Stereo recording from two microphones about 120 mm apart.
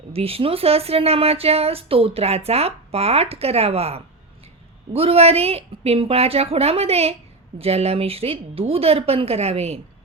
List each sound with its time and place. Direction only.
0.1 s speech: 55° right (ahead or behind)